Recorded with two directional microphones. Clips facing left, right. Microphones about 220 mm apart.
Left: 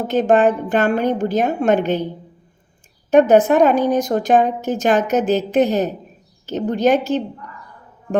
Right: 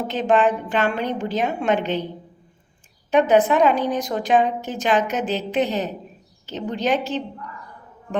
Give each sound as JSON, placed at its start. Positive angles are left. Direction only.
{"t": 0.1, "sound": "a woman's voice", "side_deg": 45}
{"t": 3.1, "sound": "a woman's voice", "side_deg": 45}